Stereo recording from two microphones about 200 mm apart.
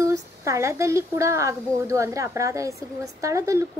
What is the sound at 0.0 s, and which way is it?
A woman's voice, 15° right (ahead or behind).